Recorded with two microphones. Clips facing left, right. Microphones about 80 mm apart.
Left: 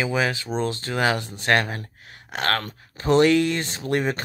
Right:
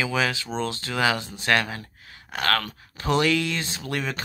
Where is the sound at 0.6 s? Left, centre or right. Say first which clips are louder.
Left 1 dB; left.